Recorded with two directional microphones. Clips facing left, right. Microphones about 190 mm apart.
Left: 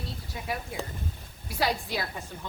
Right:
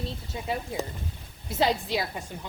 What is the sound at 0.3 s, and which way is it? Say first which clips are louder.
A woman's voice: right 3 dB; 25° right (ahead or behind).